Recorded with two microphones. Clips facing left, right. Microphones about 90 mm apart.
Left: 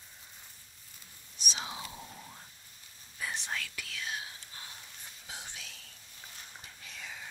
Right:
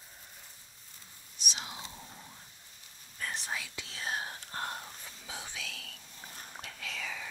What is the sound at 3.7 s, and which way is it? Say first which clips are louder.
Speech: right 3 dB; 30° right (ahead or behind).